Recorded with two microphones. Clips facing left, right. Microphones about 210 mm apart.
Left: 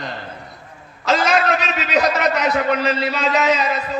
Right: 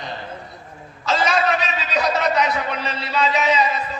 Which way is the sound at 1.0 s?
90° left.